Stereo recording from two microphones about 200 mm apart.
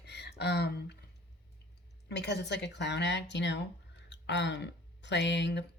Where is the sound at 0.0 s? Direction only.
55° left (ahead or behind).